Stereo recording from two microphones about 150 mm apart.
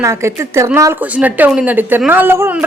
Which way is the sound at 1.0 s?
10° right (ahead or behind).